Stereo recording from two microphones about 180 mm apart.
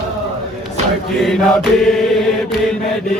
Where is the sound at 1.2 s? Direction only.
Centre (ahead or behind).